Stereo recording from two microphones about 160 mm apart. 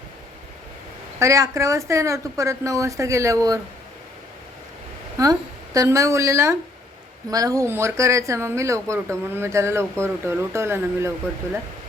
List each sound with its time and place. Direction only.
1.2 s a woman's voice: 20° right (ahead or behind)
5.1 s a woman's voice: 20° right (ahead or behind)